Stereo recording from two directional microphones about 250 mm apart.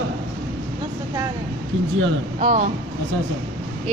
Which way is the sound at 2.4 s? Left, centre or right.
Right.